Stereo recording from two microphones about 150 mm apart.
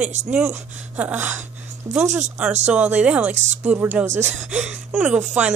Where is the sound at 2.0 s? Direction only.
50° right (ahead or behind).